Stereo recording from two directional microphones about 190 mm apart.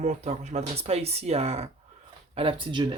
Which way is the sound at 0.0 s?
40° right (ahead or behind).